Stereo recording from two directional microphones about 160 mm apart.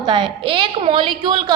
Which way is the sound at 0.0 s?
30° right (ahead or behind).